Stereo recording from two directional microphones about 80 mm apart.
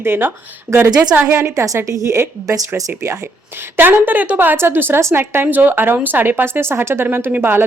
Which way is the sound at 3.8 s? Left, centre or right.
Right.